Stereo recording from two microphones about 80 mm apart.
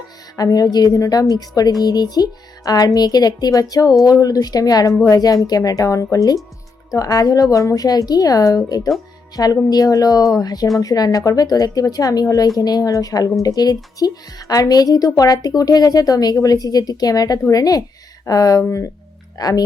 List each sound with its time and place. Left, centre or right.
0.3 s a woman's voice: left
19.4 s speech: left